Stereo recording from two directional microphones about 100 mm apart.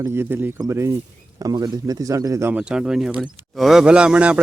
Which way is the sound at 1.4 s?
40° right (ahead or behind).